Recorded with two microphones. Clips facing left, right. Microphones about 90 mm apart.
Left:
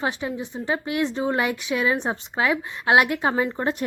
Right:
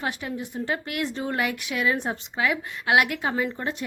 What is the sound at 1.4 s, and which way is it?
A woman's voice, 30° left (ahead or behind).